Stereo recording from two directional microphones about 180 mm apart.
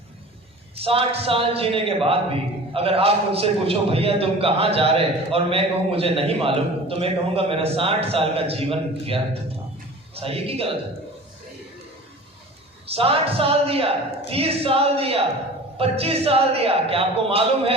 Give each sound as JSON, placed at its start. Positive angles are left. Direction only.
{"t": 0.8, "sound": "a man's voice", "side_deg": -30}
{"t": 12.9, "sound": "a man's voice", "side_deg": -35}